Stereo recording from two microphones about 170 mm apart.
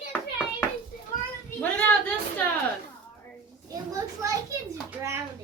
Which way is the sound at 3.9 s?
20° right (ahead or behind).